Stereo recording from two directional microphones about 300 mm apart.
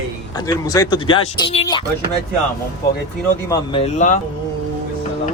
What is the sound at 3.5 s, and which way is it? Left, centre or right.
Speech, centre.